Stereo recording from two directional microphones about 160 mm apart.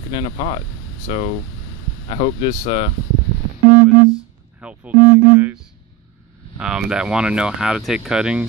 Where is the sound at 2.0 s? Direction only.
40° left (ahead or behind).